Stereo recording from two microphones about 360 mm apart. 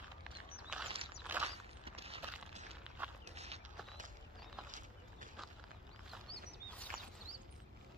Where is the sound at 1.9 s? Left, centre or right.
Centre.